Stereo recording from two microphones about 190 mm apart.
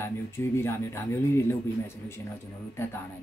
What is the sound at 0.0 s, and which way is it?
Speech, 15° left (ahead or behind).